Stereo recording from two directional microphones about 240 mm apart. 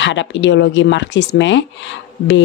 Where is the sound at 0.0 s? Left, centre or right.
Left.